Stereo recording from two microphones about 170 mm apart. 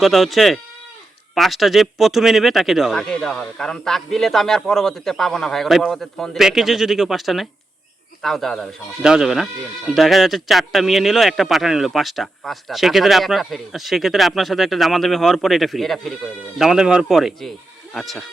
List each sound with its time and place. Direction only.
0.0 s speech: centre (ahead or behind)